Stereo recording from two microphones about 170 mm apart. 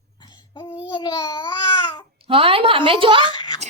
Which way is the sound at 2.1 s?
35° right (ahead or behind).